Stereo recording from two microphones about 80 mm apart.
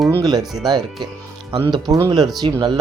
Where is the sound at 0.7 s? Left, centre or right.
Right.